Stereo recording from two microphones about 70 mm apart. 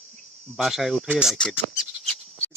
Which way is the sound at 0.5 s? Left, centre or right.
Centre.